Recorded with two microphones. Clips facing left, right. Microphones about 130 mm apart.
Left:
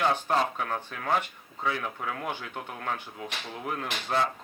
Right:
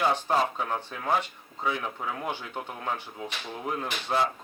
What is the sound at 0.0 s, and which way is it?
Speech, 10° right (ahead or behind).